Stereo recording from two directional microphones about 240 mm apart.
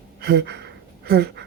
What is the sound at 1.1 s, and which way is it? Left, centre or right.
Speech, right.